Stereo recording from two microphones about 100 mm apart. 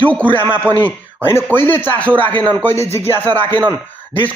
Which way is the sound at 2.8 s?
90° right.